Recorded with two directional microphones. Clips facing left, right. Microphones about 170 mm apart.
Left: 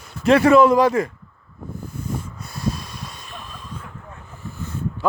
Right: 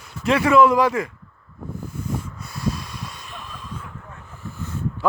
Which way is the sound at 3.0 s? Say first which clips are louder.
Even; 15° right (ahead or behind).